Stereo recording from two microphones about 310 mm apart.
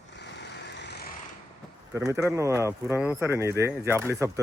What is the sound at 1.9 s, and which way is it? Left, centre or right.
Speech, centre.